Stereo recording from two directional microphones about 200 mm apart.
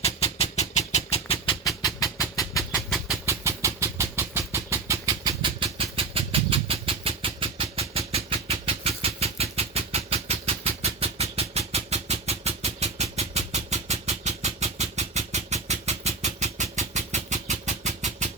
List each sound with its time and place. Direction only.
0.0 s vehicle: 30° left (ahead or behind)
1.6 s vehicle: 15° left (ahead or behind)
2.7 s train: centre (ahead or behind)
3.2 s vehicle: 15° right (ahead or behind); by 18.3 s 35° right (ahead or behind)